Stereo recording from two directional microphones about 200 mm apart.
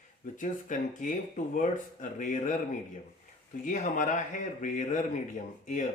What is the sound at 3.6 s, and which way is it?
Speech, 40° left (ahead or behind).